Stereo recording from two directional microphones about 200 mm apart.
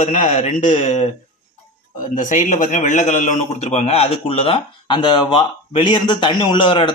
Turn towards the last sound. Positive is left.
turn(degrees=25)  # may be behind; listen again after turning